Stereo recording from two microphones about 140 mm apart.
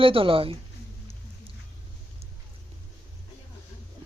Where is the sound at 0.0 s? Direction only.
40° right (ahead or behind).